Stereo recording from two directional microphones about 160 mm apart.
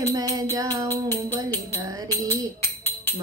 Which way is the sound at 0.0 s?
25° right (ahead or behind).